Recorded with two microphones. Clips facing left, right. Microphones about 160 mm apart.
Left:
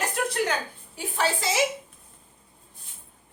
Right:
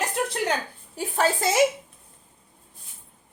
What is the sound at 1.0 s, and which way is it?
Speech, 45° right (ahead or behind).